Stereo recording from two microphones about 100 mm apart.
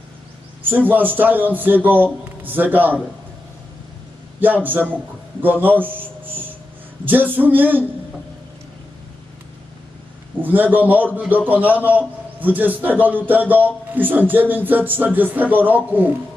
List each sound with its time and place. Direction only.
0.7 s a man's voice: 20° right (ahead or behind)
4.6 s a man's voice: 20° right (ahead or behind)
5.6 s a sound: 20° right (ahead or behind)
7.0 s a man's voice: 20° right (ahead or behind)
10.4 s a man's voice: 20° right (ahead or behind)